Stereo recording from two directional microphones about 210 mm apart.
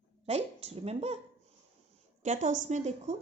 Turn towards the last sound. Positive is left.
turn(degrees=-35)  # may be behind; listen again after turning